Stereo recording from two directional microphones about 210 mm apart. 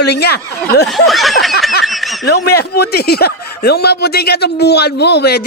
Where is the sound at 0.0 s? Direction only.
50° left (ahead or behind).